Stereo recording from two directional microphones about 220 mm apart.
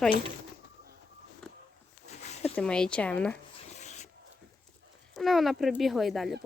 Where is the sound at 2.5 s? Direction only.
5° left (ahead or behind).